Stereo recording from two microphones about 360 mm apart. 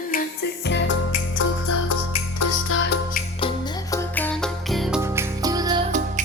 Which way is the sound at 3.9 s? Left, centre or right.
Centre.